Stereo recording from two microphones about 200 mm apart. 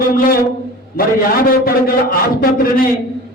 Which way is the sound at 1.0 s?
45° left (ahead or behind).